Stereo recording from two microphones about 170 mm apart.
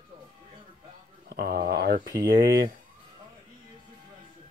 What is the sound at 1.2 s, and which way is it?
Speech, 65° right (ahead or behind).